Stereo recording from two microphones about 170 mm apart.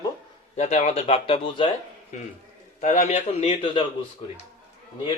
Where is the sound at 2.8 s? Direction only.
45° left (ahead or behind).